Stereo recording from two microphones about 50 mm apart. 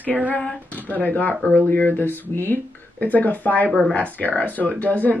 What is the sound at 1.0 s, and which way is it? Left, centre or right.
Speech, left.